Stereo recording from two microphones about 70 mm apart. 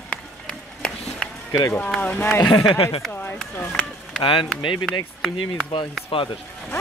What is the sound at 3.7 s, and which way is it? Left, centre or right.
Speech, centre.